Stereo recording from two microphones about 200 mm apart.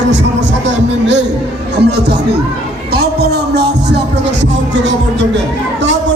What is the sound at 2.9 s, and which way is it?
Speech, 55° right (ahead or behind).